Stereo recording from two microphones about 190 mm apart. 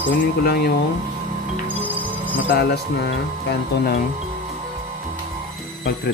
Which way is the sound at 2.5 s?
55° left (ahead or behind).